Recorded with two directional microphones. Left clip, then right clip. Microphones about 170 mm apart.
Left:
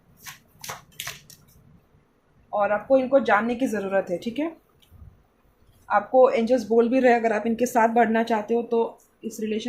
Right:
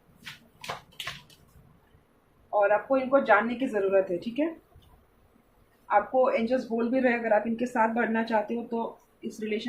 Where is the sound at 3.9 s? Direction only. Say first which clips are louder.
Left 1 dB; 60° left (ahead or behind).